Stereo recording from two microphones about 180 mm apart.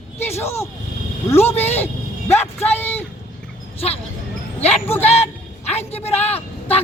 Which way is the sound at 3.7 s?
35° left (ahead or behind).